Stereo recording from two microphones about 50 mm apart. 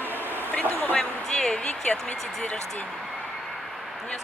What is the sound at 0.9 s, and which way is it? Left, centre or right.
A woman's voice, centre.